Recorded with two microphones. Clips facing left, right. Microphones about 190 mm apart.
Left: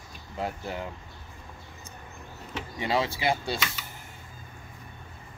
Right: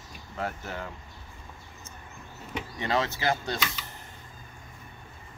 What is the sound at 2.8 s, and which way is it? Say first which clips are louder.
Speech: left 1 dB; 10° left (ahead or behind).